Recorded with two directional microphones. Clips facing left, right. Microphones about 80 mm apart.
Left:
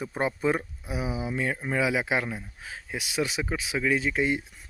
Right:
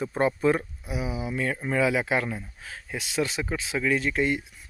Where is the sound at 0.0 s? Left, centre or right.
Centre.